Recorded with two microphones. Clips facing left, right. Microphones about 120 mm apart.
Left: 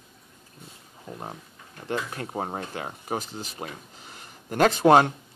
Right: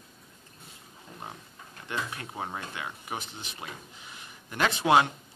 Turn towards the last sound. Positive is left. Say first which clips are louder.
# left 6 dB
turn(degrees=45)  # may be behind; listen again after turning